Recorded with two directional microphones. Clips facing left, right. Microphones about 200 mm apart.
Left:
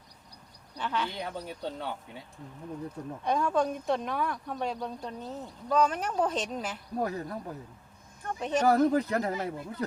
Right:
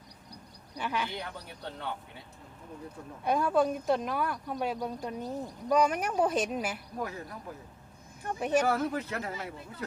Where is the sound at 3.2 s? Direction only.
5° right (ahead or behind).